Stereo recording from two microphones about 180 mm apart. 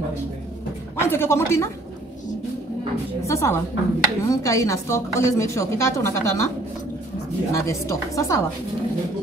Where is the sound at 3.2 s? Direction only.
15° left (ahead or behind).